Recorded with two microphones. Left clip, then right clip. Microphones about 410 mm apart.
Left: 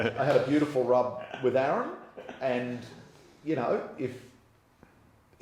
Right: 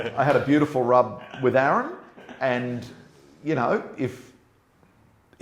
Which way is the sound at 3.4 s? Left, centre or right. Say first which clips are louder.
Right 5 dB; right.